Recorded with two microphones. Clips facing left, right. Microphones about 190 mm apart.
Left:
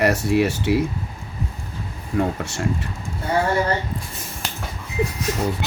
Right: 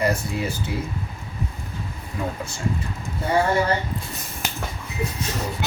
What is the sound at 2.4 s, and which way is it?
Speech, 75° left (ahead or behind).